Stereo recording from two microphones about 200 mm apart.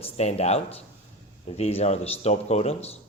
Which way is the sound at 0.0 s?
30° left (ahead or behind).